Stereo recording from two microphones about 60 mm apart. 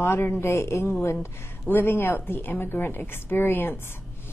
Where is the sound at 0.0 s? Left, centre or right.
Left.